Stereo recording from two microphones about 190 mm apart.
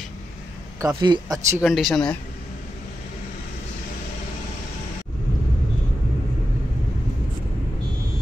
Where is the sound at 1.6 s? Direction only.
Centre (ahead or behind).